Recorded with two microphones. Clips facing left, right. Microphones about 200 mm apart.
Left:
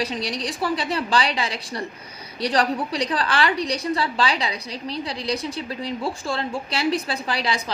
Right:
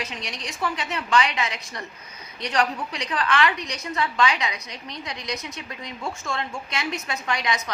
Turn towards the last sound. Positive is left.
turn(degrees=30)  # may be behind; listen again after turning